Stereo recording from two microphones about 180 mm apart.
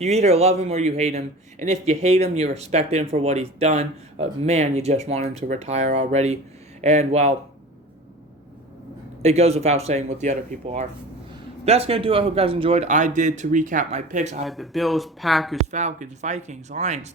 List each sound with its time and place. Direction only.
0.0 s a man's voice: 35° right (ahead or behind)
9.2 s a man's voice: 35° right (ahead or behind)
14.4 s speech: centre (ahead or behind)
15.7 s a man's voice: 40° right (ahead or behind)